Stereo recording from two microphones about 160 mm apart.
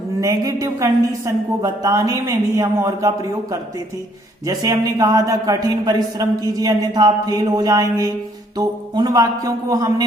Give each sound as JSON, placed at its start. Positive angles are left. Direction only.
{"t": 0.2, "sound": "a man's voice", "side_deg": -20}
{"t": 4.4, "sound": "a man's voice", "side_deg": -20}